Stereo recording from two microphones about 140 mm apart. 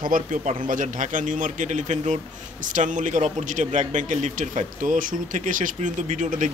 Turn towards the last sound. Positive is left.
turn(degrees=-65)  # may be behind; listen again after turning